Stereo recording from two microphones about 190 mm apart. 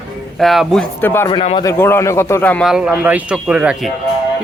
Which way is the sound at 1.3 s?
25° left (ahead or behind).